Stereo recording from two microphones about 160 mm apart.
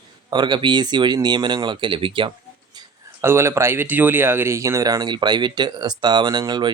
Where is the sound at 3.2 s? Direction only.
15° right (ahead or behind).